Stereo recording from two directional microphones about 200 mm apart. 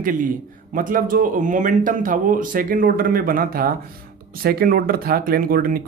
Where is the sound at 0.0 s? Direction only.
45° right (ahead or behind).